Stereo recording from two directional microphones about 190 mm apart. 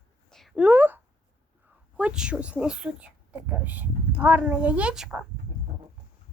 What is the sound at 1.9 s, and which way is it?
Speech, 5° right (ahead or behind).